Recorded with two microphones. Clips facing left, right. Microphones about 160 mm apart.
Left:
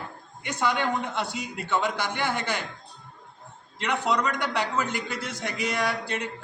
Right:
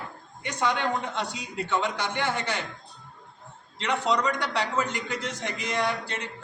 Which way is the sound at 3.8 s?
10° left (ahead or behind).